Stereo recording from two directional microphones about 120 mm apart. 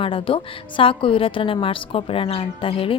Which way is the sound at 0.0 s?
50° left (ahead or behind).